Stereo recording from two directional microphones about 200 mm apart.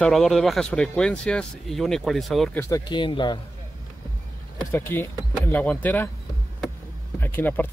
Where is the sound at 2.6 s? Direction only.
15° left (ahead or behind).